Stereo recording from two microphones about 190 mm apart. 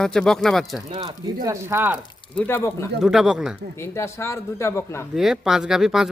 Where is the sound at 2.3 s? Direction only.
10° left (ahead or behind).